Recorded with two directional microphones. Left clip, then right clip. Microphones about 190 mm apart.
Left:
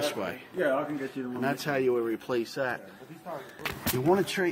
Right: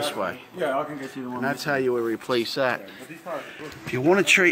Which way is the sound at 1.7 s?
20° right (ahead or behind).